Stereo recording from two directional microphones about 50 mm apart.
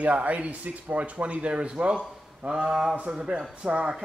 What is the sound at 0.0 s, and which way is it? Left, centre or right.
A man's voice, right.